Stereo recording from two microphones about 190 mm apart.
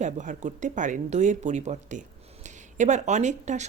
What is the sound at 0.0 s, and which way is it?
Speech, 40° right (ahead or behind).